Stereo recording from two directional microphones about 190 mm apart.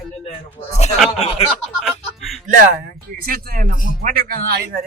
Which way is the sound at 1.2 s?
30° left (ahead or behind).